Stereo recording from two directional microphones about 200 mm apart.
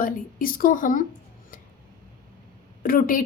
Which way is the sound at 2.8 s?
45° left (ahead or behind).